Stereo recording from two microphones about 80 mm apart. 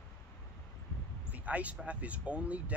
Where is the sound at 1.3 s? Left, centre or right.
Centre.